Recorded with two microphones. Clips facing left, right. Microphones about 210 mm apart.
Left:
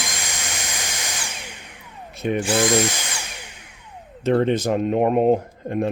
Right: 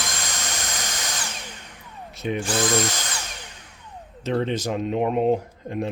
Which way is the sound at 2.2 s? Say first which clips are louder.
Left 4 dB; 55° left (ahead or behind).